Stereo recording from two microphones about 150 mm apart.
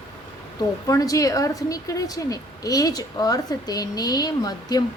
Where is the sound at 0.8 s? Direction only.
25° left (ahead or behind).